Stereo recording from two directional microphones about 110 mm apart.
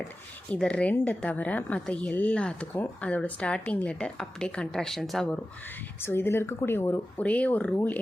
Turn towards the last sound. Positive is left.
turn(degrees=15)  # may be behind; listen again after turning